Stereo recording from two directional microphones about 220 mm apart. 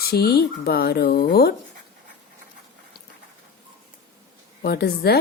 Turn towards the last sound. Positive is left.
turn(degrees=45)  # may be behind; listen again after turning